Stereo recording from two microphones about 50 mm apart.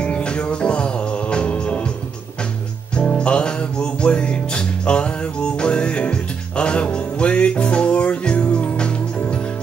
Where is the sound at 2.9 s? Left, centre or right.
Left.